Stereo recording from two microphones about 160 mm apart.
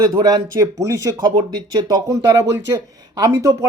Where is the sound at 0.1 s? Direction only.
25° right (ahead or behind).